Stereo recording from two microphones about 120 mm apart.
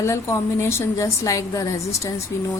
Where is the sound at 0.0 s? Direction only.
25° left (ahead or behind).